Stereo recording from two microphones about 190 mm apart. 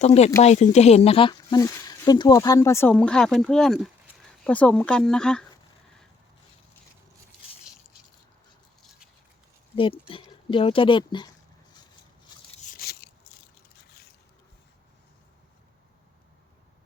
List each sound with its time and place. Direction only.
0.0 s speech: 35° left (ahead or behind); by 5.5 s 5° left (ahead or behind)
9.7 s speech: 25° left (ahead or behind)
12.5 s biting: 45° left (ahead or behind)